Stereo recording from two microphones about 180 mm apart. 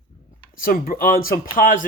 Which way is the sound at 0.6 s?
55° left (ahead or behind).